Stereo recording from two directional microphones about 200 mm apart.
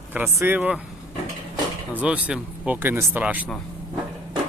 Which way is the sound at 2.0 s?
5° right (ahead or behind).